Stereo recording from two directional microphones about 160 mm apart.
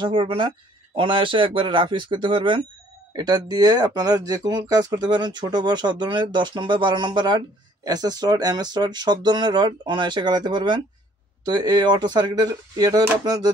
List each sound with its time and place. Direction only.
0.0 s speech: 35° right (ahead or behind)